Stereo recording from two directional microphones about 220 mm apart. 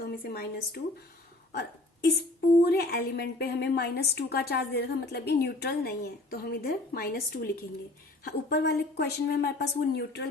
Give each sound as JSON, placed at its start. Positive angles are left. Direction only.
{"t": 0.0, "sound": "a woman's voice", "side_deg": 45}